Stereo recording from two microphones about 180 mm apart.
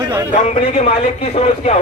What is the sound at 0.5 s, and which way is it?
A man's voice, 40° left (ahead or behind).